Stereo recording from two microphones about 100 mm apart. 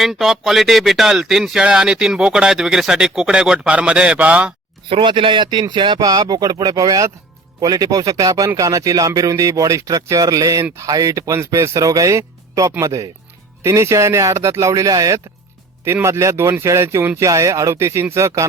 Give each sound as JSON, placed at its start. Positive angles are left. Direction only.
{"t": 0.0, "sound": "speech", "side_deg": 0}
{"t": 4.9, "sound": "speech", "side_deg": -60}